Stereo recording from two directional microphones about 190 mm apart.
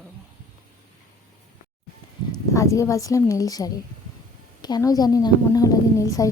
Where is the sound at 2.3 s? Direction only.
15° left (ahead or behind).